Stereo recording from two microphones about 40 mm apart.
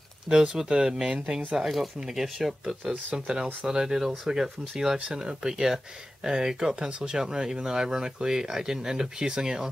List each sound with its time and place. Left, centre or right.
0.3 s speech: centre
2.0 s speech: centre
2.8 s speech: right
3.6 s speech: centre